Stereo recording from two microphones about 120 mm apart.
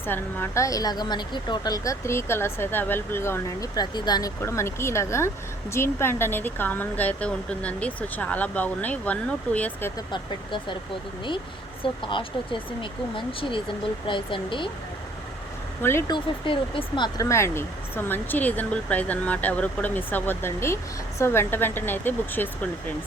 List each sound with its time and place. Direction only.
0.0 s a woman's voice: 15° left (ahead or behind)
3.8 s speech: 35° left (ahead or behind)
4.4 s a woman's voice: 20° left (ahead or behind)
10.1 s speech: 40° left (ahead or behind)
11.8 s speech: 45° left (ahead or behind)
15.8 s a woman's voice: 20° left (ahead or behind)
16.0 s speech: 40° left (ahead or behind)
17.2 s speech: 25° left (ahead or behind)